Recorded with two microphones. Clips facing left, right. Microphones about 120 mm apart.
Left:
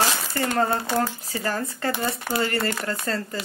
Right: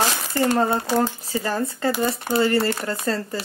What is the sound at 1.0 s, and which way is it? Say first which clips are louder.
Speech: right 3 dB; 20° right (ahead or behind).